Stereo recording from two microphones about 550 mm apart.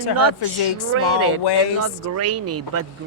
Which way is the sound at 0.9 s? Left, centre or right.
Right.